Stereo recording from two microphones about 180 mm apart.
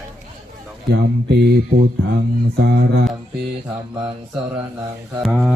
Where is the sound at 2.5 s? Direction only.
65° right (ahead or behind).